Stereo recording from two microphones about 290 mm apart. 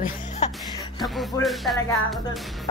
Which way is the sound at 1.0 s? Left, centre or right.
Centre.